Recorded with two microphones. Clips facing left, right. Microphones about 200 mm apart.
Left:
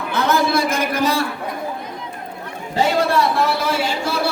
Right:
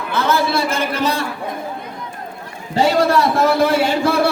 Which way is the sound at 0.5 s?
10° left (ahead or behind).